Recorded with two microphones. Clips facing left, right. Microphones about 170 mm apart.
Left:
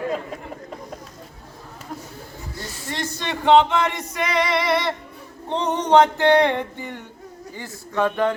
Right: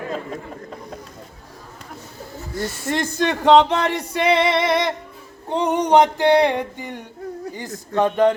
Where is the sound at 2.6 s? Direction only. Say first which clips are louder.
Right 7 dB; 50° right (ahead or behind); by 4.9 s 20° right (ahead or behind).